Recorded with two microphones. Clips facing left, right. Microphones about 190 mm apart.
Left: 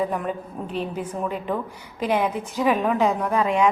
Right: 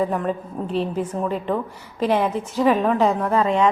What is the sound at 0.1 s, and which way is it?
A woman's voice, 5° left (ahead or behind).